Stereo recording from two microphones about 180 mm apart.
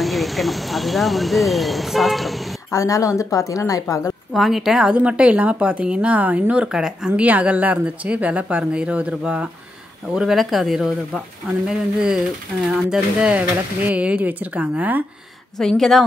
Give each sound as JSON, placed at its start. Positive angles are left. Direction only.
{"t": 0.0, "sound": "speech", "side_deg": 0}
{"t": 2.7, "sound": "speech", "side_deg": 20}
{"t": 4.3, "sound": "a woman's voice", "side_deg": 0}
{"t": 15.5, "sound": "speech", "side_deg": 0}